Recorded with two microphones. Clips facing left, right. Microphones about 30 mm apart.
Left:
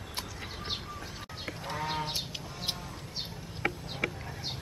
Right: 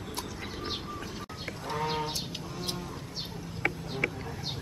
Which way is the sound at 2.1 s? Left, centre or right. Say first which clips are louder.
Right 1 dB; left.